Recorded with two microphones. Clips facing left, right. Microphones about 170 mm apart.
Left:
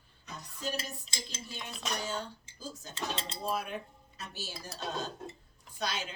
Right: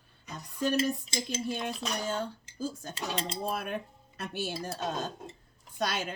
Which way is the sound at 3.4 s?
55° right (ahead or behind).